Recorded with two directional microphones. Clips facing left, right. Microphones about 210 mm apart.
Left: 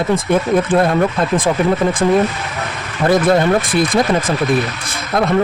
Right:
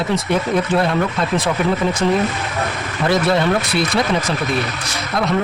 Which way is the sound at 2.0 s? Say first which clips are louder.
Left 3 dB; 45° left (ahead or behind).